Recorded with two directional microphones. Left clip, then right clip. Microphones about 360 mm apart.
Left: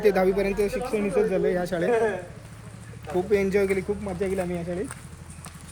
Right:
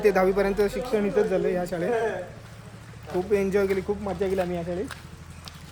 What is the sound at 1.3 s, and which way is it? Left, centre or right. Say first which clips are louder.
Speech: left 1 dB; centre.